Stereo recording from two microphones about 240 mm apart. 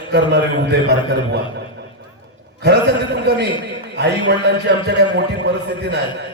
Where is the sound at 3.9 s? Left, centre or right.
Right.